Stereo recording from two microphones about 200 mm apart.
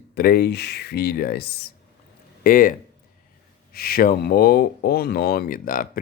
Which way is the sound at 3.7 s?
50° left (ahead or behind).